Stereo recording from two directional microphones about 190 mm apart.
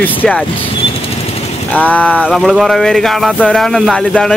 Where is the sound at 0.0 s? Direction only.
10° left (ahead or behind).